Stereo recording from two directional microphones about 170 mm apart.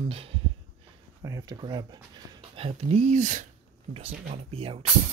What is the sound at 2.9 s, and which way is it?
Speech, 40° right (ahead or behind).